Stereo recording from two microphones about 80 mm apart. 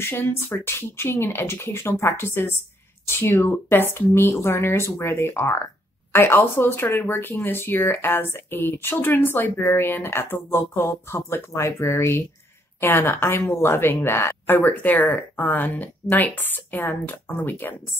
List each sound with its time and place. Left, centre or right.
0.0 s speech: left